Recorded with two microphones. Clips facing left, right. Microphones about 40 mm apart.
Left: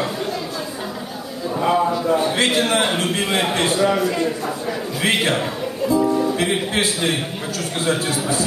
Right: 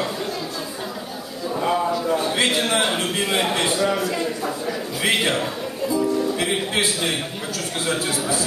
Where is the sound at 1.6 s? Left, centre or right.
Centre.